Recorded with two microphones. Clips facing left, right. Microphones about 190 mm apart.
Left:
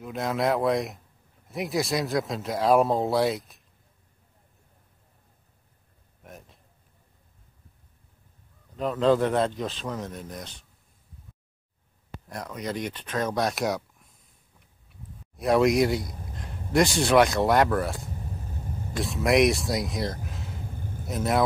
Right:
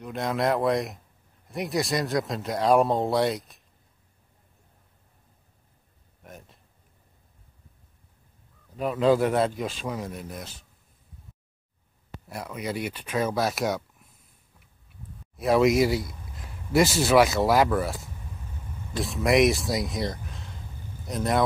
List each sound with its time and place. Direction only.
0.0 s speech: centre (ahead or behind)
6.2 s a sound: centre (ahead or behind)
8.7 s speech: 10° right (ahead or behind)
12.3 s speech: 5° right (ahead or behind)
14.9 s a sound: centre (ahead or behind)
16.3 s speech: 5° right (ahead or behind)
18.3 s vehicle: 40° left (ahead or behind)
18.9 s speech: centre (ahead or behind)
20.7 s a sound: 55° left (ahead or behind)
21.1 s speech: 5° left (ahead or behind)